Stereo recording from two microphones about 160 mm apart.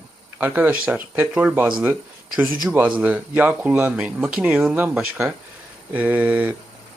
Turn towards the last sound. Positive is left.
turn(degrees=-10)  # may be behind; listen again after turning